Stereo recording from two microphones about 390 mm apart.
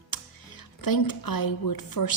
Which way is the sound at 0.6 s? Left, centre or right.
Left.